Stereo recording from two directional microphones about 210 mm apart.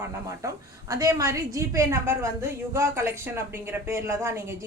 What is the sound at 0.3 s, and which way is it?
A woman's voice, 15° right (ahead or behind).